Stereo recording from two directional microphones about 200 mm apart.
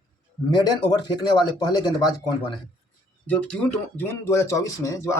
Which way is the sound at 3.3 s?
5° left (ahead or behind).